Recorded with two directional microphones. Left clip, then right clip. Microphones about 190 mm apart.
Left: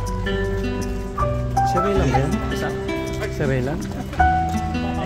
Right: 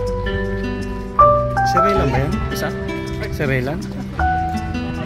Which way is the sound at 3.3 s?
20° right (ahead or behind).